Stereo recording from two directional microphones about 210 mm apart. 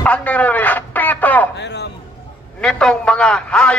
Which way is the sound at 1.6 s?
55° left (ahead or behind).